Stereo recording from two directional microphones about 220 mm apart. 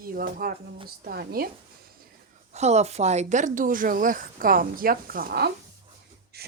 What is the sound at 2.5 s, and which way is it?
Speech, 30° right (ahead or behind).